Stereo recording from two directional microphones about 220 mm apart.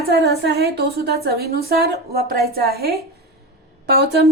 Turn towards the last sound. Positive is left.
turn(degrees=-50)  # may be behind; listen again after turning